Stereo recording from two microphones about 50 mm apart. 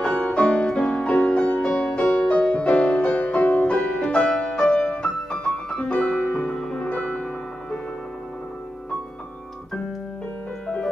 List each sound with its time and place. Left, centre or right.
0.2 s music: left
1.3 s music: left